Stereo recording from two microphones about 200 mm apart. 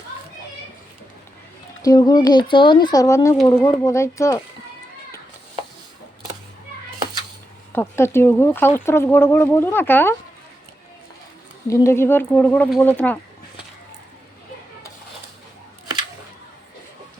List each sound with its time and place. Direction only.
1.8 s speech: 20° left (ahead or behind)
7.7 s speech: 10° left (ahead or behind)
11.7 s speech: 15° left (ahead or behind)